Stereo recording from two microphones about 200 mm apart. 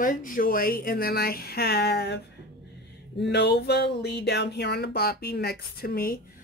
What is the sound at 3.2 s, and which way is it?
Speech, 55° left (ahead or behind).